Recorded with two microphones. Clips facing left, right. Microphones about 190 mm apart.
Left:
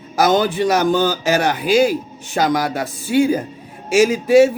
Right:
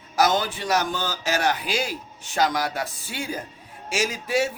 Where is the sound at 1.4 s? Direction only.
55° left (ahead or behind).